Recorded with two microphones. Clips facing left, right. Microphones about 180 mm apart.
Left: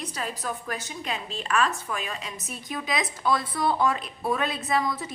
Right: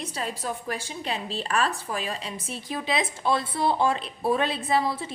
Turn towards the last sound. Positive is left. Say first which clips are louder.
# right 1 dB
turn(degrees=-30)  # may be behind; listen again after turning